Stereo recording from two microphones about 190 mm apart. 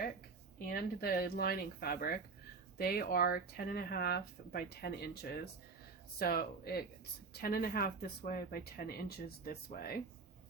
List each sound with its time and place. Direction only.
0.6 s speech: 55° left (ahead or behind)